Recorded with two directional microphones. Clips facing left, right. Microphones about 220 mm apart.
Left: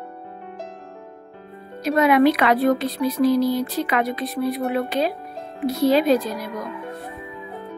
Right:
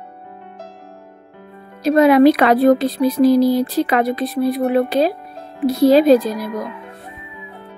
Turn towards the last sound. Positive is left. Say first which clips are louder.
# right 7 dB
turn(degrees=-35)  # may be behind; listen again after turning